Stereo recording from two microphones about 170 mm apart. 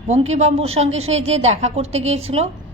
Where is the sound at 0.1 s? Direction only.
40° right (ahead or behind).